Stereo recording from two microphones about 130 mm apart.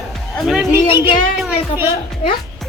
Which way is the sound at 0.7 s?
15° right (ahead or behind).